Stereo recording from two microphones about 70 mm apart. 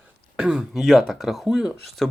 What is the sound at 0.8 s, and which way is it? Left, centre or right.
Speech, centre.